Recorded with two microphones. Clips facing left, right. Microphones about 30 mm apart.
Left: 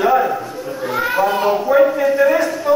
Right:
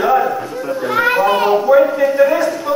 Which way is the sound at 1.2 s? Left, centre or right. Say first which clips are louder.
Right 2 dB; right.